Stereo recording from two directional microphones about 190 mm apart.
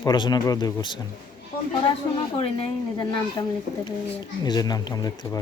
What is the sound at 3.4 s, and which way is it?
Speech, 20° left (ahead or behind).